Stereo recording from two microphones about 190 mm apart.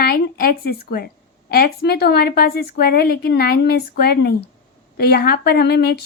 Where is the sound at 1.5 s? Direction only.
55° left (ahead or behind).